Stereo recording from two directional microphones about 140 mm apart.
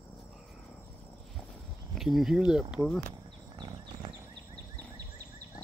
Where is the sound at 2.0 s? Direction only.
Centre (ahead or behind).